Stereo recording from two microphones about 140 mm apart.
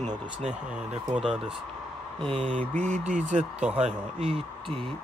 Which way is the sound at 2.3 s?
40° right (ahead or behind).